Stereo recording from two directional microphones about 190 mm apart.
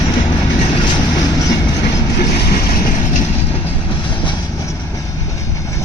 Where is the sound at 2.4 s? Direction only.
50° left (ahead or behind).